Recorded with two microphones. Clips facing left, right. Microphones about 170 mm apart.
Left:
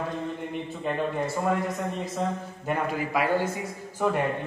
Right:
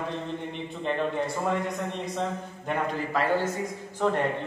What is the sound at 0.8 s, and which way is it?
Speech, 5° left (ahead or behind).